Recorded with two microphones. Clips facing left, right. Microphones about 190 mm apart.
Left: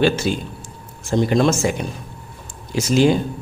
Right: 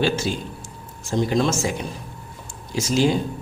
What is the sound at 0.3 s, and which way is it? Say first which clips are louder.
Speech: left 4 dB; 65° left (ahead or behind).